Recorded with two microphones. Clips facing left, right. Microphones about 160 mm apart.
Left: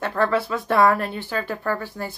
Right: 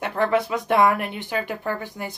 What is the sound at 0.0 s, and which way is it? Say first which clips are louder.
A woman's voice: even; 20° right (ahead or behind).